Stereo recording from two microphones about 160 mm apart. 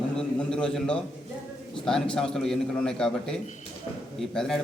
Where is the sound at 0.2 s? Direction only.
5° left (ahead or behind).